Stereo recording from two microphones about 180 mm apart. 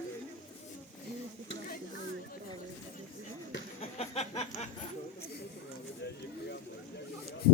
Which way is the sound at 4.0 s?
35° left (ahead or behind).